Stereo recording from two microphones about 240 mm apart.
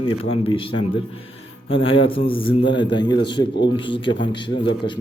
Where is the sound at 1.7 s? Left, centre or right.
Left.